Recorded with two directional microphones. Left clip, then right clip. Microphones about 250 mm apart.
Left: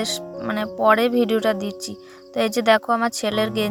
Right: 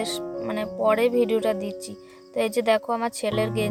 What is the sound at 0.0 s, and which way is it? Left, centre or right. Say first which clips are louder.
Speech: left 2 dB; centre.